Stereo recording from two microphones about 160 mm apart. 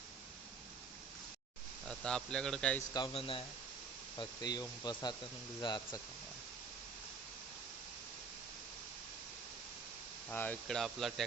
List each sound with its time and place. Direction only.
1.9 s speech: 5° left (ahead or behind)
3.1 s speech: 35° left (ahead or behind)
4.2 s speech: 25° left (ahead or behind)
10.2 s speech: 10° left (ahead or behind)